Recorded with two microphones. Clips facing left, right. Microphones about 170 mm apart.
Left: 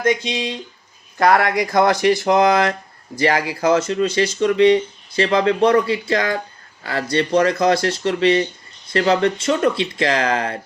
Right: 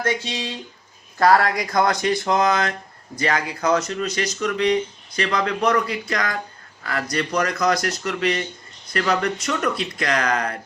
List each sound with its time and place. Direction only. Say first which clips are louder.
0.3 s speech: left 5 dB; 15° left (ahead or behind)